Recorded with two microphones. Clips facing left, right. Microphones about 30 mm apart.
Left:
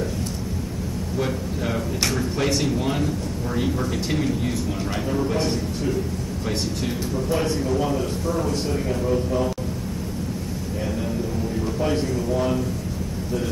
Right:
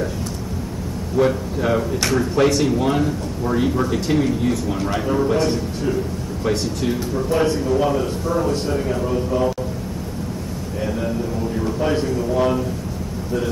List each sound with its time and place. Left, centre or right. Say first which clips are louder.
1.1 s a man's voice: right 9 dB; centre
5.1 s a man's voice: right 5 dB; right
5.4 s speech: right 4 dB; centre
7.2 s a man's voice: right 5 dB; centre
7.7 s a man's voice: right 4 dB; centre
11.6 s a man's voice: right 3 dB; centre